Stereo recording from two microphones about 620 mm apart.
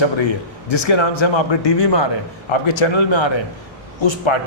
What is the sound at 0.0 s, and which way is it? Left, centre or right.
A man's voice, left.